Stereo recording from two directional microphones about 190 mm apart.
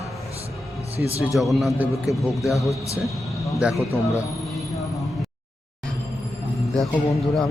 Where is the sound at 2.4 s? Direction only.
15° left (ahead or behind).